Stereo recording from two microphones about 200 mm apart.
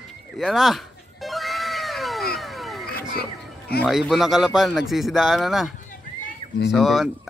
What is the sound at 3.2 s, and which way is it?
Speech, 50° left (ahead or behind).